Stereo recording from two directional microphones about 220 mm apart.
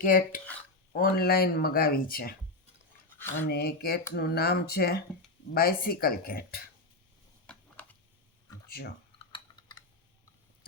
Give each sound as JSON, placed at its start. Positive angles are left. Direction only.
{"t": 0.0, "sound": "speech", "side_deg": 40}
{"t": 3.5, "sound": "speech", "side_deg": 45}
{"t": 7.5, "sound": "a sound", "side_deg": 5}
{"t": 9.1, "sound": "typing", "side_deg": 20}